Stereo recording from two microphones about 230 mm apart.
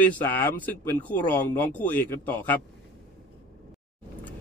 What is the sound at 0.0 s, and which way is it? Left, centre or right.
A man's voice, centre.